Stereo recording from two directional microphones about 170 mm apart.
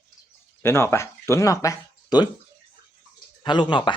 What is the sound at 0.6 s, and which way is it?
Speech, 15° left (ahead or behind).